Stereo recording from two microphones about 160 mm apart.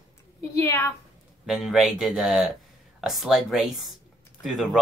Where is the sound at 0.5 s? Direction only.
15° left (ahead or behind).